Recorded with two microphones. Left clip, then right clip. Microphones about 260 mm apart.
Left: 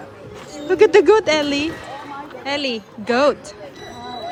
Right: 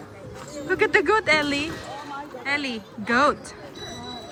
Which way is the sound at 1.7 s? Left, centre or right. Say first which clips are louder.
Left 3 dB; centre.